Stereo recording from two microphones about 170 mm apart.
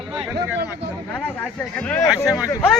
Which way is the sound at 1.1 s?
5° left (ahead or behind).